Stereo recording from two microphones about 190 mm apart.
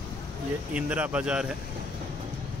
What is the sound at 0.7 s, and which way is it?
Speech, 5° right (ahead or behind).